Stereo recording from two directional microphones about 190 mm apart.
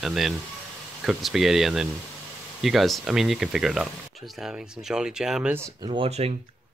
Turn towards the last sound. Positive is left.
turn(degrees=-30)  # may be behind; listen again after turning